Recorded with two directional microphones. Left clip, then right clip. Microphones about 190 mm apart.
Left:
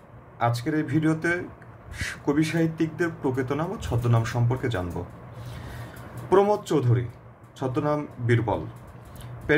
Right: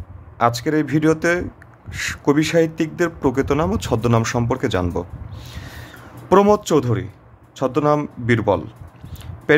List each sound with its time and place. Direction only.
0.4 s a man's voice: 55° right (ahead or behind)
6.2 s a man's voice: 55° right (ahead or behind)